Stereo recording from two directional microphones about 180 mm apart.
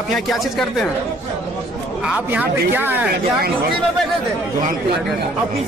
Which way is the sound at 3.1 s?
60° right (ahead or behind).